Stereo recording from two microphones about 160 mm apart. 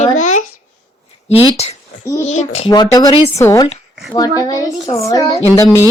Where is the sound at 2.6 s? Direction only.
25° left (ahead or behind).